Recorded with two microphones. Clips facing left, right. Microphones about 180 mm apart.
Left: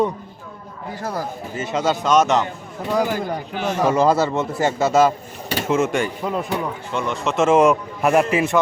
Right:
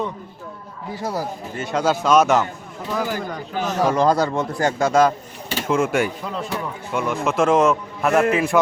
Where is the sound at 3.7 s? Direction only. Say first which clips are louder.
Left 1 dB; 10° left (ahead or behind).